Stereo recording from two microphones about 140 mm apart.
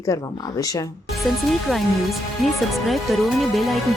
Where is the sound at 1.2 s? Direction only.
Centre (ahead or behind).